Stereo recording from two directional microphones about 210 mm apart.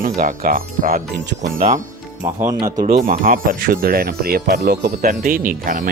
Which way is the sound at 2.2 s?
15° right (ahead or behind).